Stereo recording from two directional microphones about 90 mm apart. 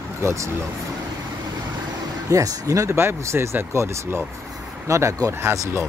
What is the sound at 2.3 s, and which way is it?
Speech, 35° right (ahead or behind).